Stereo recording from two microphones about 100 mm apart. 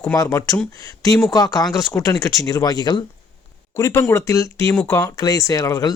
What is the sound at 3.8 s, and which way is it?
Speech, 25° left (ahead or behind).